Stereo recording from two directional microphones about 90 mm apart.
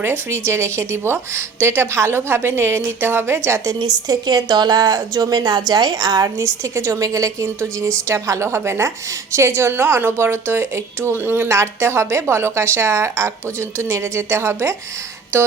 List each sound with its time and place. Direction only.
0.0 s a woman's voice: 30° right (ahead or behind)
3.8 s a woman's voice: 50° right (ahead or behind); by 14.8 s 30° right (ahead or behind)